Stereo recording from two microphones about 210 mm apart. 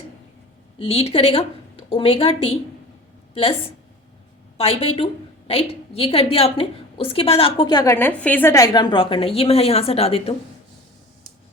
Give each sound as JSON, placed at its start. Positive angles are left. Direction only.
{"t": 0.8, "sound": "a woman's voice", "side_deg": 30}
{"t": 4.5, "sound": "a woman's voice", "side_deg": 30}